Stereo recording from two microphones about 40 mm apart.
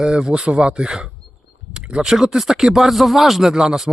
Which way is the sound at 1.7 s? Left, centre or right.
Right.